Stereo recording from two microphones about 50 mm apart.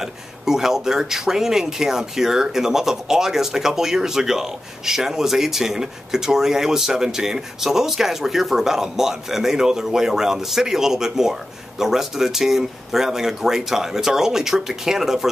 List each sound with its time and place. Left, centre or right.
0.0 s speech: centre